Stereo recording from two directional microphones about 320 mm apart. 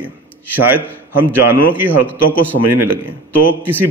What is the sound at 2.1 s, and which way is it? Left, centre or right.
Speech, centre.